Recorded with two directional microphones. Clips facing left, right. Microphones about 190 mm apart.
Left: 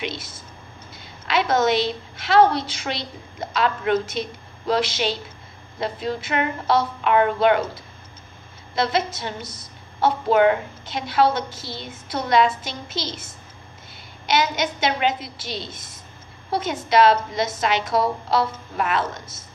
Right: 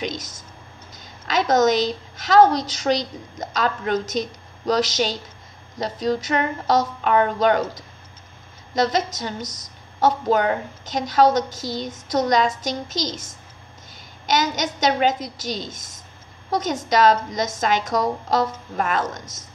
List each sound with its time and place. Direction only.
0.0 s a woman's voice: 45° right (ahead or behind)
14.2 s a woman's voice: 45° right (ahead or behind)